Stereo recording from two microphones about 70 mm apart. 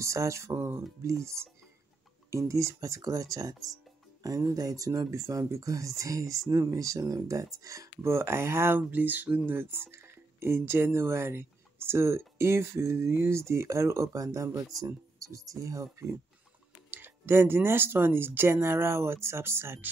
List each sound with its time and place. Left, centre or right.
0.0 s speech: right
16.9 s speech: right